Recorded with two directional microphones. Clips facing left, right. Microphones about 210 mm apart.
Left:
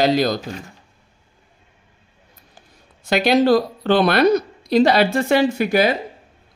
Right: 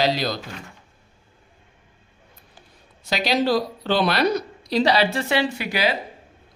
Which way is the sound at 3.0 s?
55° left (ahead or behind).